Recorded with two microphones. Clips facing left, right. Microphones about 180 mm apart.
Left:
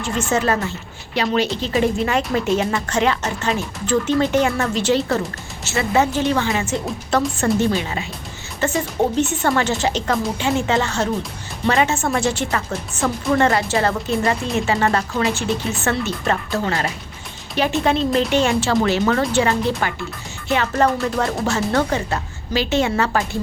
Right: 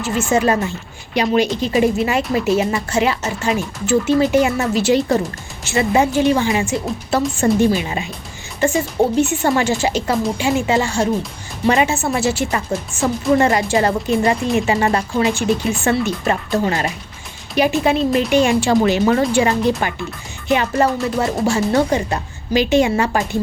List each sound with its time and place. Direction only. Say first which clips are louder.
0.0 s speech: right 3 dB; 10° right (ahead or behind)
8.6 s speech: right 3 dB; 10° right (ahead or behind)